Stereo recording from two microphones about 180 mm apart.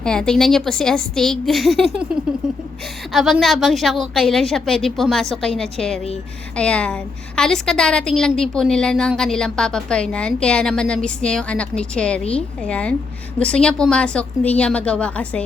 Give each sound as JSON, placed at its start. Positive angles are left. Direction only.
{"t": 0.0, "sound": "a woman's voice", "side_deg": 5}